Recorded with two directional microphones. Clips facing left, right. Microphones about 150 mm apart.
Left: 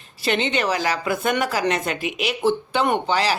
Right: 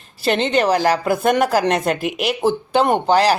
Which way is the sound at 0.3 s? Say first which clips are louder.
Right 5 dB; 40° right (ahead or behind).